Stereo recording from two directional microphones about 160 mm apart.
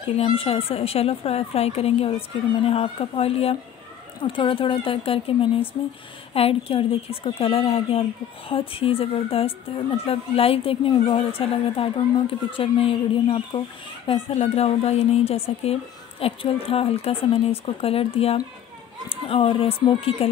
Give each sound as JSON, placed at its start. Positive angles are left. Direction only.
{"t": 0.0, "sound": "a woman's voice", "side_deg": 35}